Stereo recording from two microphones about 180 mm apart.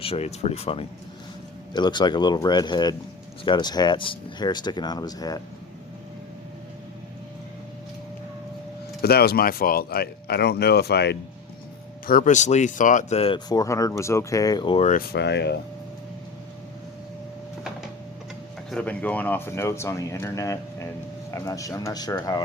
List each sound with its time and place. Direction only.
0.0 s speech: 35° left (ahead or behind)
9.0 s speech: 60° left (ahead or behind)
12.0 s speech: 50° left (ahead or behind); by 14.8 s 30° left (ahead or behind)
15.1 s speech: 70° left (ahead or behind)
18.7 s speech: 5° left (ahead or behind); by 22.4 s 20° left (ahead or behind)